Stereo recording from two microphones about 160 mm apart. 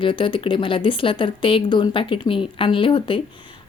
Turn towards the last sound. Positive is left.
turn(degrees=30)  # may be behind; listen again after turning